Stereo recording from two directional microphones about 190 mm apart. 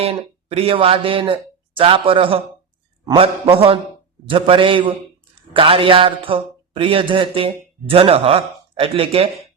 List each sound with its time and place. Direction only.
0.0 s a man's voice: 30° right (ahead or behind)